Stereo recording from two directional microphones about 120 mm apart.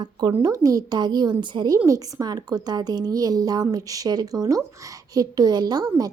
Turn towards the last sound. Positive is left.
turn(degrees=-30)  # may be behind; listen again after turning